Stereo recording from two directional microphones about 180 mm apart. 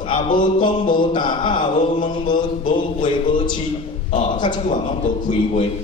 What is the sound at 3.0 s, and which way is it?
Speech, 25° left (ahead or behind).